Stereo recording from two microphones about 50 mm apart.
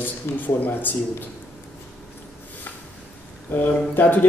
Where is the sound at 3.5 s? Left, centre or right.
Left.